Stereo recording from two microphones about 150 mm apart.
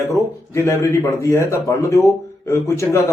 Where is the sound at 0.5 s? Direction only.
20° left (ahead or behind).